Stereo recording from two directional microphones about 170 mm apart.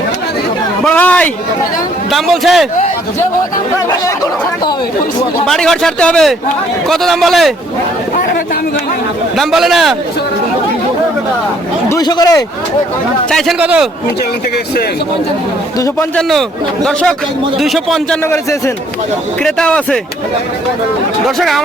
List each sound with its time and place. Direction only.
0.9 s a sound: 10° left (ahead or behind)
2.0 s a man's voice: centre (ahead or behind)
5.5 s a man's voice: centre (ahead or behind)
9.4 s a man's voice: centre (ahead or behind)
11.9 s speech: 25° left (ahead or behind)
13.3 s a man's voice: 5° right (ahead or behind)
16.8 s a man's voice: centre (ahead or behind)
19.4 s a man's voice: 5° left (ahead or behind)
21.2 s a man's voice: centre (ahead or behind)